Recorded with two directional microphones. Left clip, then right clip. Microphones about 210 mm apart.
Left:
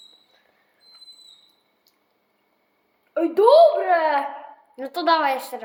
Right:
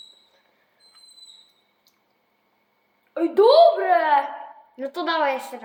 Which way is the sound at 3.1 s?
10° left (ahead or behind).